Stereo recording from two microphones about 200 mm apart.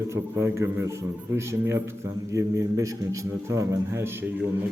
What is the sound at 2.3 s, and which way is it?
A man's voice, 15° right (ahead or behind).